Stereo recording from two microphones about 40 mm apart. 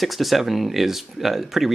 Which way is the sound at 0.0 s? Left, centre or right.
Centre.